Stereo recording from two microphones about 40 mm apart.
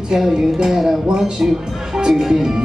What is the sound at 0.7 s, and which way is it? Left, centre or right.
Speech, centre.